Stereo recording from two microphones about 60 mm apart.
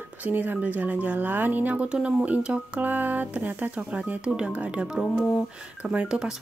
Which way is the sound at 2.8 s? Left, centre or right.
Right.